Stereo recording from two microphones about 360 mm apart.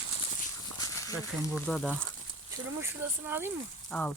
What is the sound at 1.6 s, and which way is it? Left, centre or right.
Speech, centre.